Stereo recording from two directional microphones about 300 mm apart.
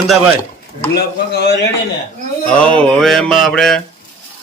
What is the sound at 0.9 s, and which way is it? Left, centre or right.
Speech, left.